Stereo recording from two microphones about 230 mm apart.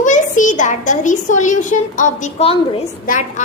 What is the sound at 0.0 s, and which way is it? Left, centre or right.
A child's voice, left.